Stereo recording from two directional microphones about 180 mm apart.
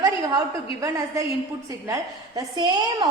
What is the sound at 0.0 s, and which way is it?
A woman's voice, 20° right (ahead or behind).